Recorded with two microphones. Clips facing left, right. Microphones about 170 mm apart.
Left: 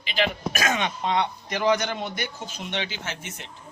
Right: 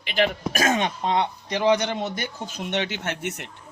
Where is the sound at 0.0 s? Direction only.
55° right (ahead or behind).